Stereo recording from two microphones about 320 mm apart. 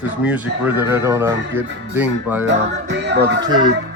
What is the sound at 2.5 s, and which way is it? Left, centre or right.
Music, right.